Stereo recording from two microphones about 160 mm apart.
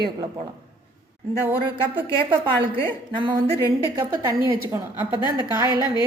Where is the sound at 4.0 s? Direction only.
15° right (ahead or behind).